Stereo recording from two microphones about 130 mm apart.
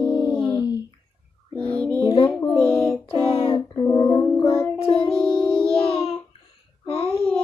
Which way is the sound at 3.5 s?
30° left (ahead or behind).